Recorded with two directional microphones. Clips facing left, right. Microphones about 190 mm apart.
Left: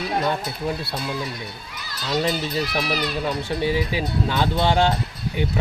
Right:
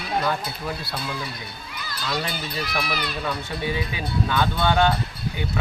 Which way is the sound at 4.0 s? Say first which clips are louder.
Left 1 dB; 25° left (ahead or behind).